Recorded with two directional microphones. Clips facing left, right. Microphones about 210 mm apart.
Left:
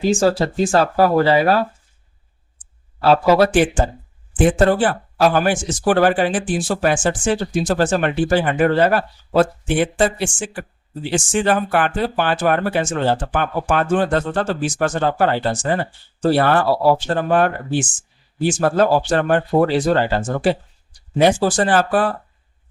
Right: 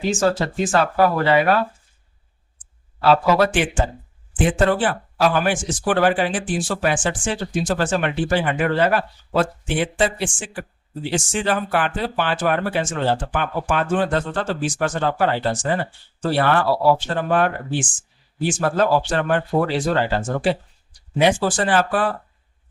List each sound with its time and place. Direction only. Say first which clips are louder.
0.0 s speech: left 3 dB; 35° left (ahead or behind)
3.0 s speech: left 3 dB; 40° left (ahead or behind)